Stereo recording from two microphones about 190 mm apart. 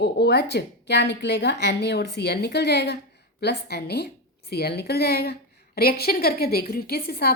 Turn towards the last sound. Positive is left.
turn(degrees=55)  # may be behind; listen again after turning